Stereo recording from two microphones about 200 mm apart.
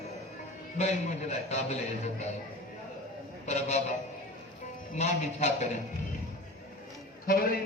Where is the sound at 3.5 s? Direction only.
35° left (ahead or behind).